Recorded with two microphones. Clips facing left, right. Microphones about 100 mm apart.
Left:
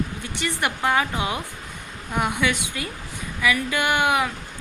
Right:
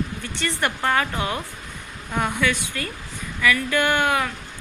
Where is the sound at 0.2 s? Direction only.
15° left (ahead or behind).